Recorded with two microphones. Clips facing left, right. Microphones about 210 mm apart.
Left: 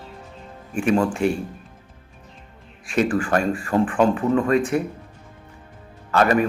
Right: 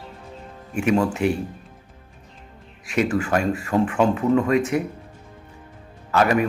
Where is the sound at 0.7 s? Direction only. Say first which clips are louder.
Even; 10° right (ahead or behind).